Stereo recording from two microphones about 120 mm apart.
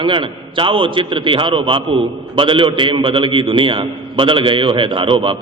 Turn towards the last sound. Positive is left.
turn(degrees=-45)  # may be behind; listen again after turning